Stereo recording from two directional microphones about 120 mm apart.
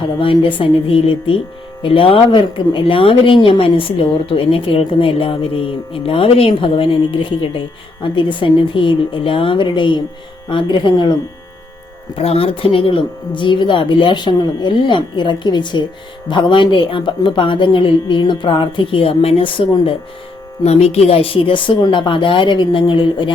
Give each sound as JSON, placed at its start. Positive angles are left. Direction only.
{"t": 0.0, "sound": "speech", "side_deg": 45}
{"t": 12.1, "sound": "speech", "side_deg": 55}
{"t": 20.7, "sound": "speech", "side_deg": 60}